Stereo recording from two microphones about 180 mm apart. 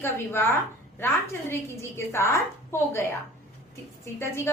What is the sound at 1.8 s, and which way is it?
Speech, 15° left (ahead or behind).